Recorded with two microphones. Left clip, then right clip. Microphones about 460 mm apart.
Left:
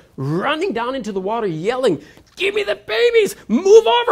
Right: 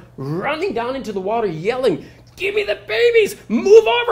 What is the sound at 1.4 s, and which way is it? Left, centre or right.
Speech, left.